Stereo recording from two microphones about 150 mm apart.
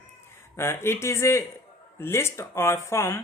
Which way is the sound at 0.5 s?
15° left (ahead or behind).